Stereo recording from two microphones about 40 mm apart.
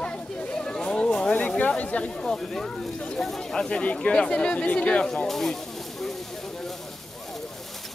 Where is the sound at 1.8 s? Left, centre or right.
Left.